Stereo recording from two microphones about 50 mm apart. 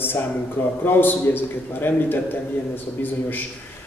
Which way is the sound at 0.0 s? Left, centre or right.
Left.